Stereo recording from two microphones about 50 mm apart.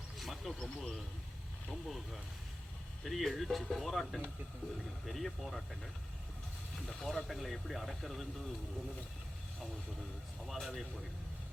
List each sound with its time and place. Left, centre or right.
0.2 s a sound: centre
0.6 s speech: centre
10.4 s speech: centre